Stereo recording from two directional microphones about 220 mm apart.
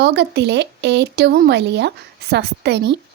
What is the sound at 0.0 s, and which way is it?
Speech, 50° right (ahead or behind).